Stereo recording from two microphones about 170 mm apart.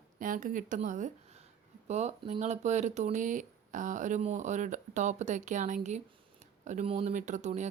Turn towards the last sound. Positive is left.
turn(degrees=-45)  # may be behind; listen again after turning